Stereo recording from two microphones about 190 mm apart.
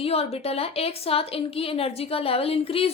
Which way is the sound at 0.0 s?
30° left (ahead or behind).